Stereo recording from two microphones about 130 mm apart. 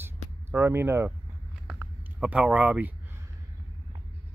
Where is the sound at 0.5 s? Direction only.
15° right (ahead or behind).